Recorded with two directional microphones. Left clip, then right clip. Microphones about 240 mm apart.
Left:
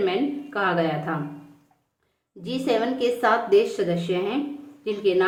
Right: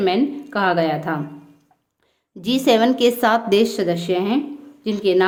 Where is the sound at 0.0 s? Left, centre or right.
Right.